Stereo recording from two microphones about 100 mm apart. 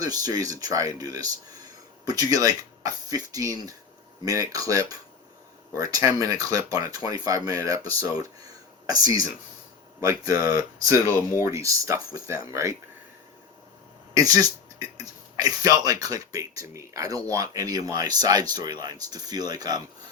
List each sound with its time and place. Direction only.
0.0 s speech: 40° right (ahead or behind)
14.1 s speech: 35° right (ahead or behind)